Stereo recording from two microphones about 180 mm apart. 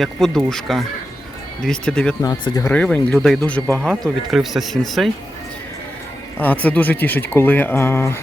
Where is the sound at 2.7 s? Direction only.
5° left (ahead or behind).